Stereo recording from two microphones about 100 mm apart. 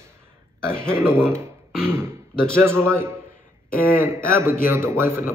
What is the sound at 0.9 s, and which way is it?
Speech, 25° right (ahead or behind).